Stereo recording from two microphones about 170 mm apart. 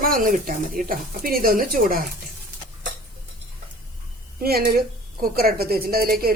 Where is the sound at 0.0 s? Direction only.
55° right (ahead or behind).